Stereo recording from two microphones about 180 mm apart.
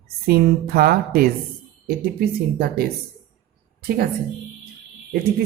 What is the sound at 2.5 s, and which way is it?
Speech, 60° right (ahead or behind).